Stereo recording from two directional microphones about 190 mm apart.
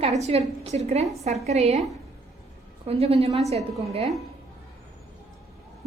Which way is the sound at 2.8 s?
30° right (ahead or behind).